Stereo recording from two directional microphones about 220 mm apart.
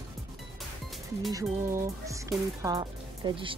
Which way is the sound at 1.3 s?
15° right (ahead or behind).